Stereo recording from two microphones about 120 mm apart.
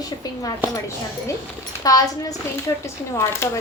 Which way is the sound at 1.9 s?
30° left (ahead or behind).